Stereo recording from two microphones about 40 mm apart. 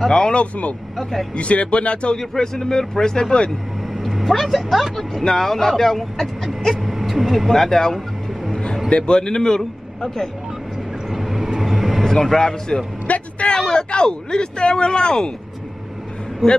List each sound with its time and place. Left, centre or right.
0.0 s speech: centre
0.3 s speech: left
2.3 s speech: centre
4.0 s speech: centre
5.2 s speech: centre
6.7 s speech: centre
8.9 s speech: left
11.1 s vehicle: centre
12.3 s speech: centre
13.0 s vehicle: left
13.6 s speech: centre